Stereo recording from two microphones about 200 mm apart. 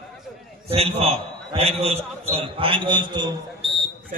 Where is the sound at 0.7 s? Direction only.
30° right (ahead or behind).